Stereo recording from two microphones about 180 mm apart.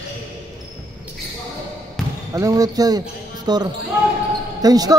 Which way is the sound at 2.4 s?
20° right (ahead or behind).